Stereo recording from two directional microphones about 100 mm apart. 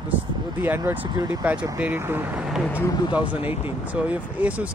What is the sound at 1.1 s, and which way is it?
Speech, 45° right (ahead or behind).